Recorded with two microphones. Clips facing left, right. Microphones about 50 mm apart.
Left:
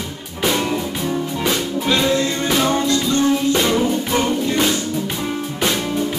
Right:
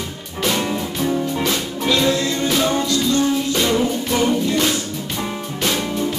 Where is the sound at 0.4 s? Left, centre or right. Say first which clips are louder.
Left 1 dB; centre.